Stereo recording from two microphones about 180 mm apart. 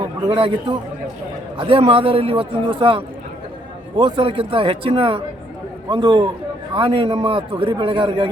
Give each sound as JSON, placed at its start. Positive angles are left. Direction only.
{"t": 0.3, "sound": "a man's voice", "side_deg": -30}